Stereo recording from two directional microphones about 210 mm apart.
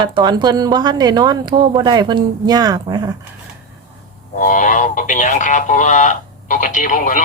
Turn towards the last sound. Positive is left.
turn(degrees=40)  # may be behind; listen again after turning